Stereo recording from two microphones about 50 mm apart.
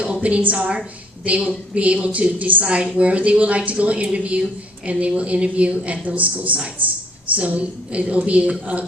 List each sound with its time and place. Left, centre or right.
0.0 s a woman's voice: right